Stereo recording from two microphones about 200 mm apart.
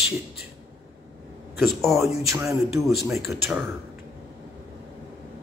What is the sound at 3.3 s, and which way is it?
Speech, 10° right (ahead or behind).